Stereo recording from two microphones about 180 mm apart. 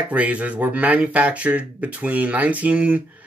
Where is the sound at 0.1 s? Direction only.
5° right (ahead or behind).